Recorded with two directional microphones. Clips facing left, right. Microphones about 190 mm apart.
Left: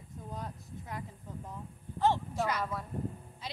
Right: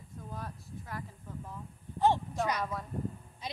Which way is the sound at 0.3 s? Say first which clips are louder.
Left 1 dB; 20° left (ahead or behind).